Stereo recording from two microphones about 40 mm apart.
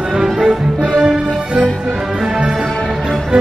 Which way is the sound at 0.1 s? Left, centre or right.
Centre.